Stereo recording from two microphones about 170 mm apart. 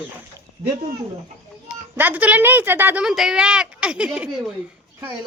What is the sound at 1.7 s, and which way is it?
Speech, 10° right (ahead or behind).